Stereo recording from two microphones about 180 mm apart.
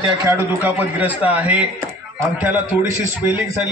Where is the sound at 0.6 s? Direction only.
10° right (ahead or behind).